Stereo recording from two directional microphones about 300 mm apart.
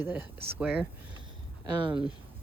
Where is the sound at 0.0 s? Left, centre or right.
Centre.